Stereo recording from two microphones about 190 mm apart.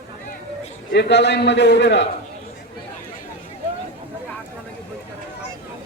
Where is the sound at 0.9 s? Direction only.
65° left (ahead or behind).